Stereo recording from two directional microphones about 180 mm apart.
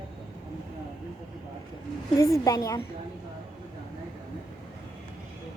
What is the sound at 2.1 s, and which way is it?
Speech, 15° left (ahead or behind).